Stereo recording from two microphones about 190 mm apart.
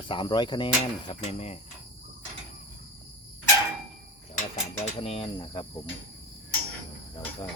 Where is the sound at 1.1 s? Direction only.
35° left (ahead or behind).